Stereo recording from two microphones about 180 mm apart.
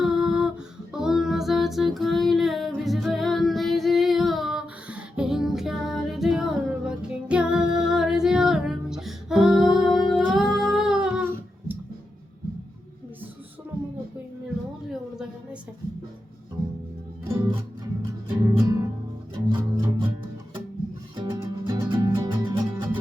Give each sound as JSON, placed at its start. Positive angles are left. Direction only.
{"t": 0.0, "sound": "a sound", "side_deg": -5}
{"t": 0.9, "sound": "female singing", "side_deg": 0}
{"t": 18.4, "sound": "music", "side_deg": -20}
{"t": 21.2, "sound": "music", "side_deg": -25}